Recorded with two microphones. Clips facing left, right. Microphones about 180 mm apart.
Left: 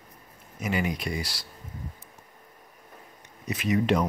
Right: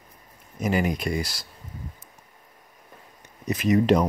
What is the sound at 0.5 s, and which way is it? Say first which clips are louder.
Speech: right 4 dB; 40° right (ahead or behind).